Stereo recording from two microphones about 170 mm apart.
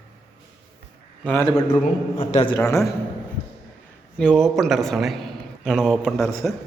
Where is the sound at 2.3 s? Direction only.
35° left (ahead or behind).